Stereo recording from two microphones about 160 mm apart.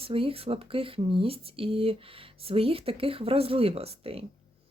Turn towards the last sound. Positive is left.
turn(degrees=-35)  # may be behind; listen again after turning